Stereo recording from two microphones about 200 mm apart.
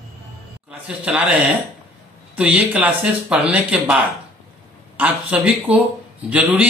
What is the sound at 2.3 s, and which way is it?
Speech, 5° right (ahead or behind).